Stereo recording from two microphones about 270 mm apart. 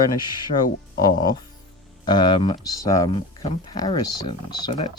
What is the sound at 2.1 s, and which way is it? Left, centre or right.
Speech, centre.